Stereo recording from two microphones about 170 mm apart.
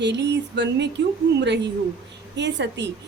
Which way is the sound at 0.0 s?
90° right.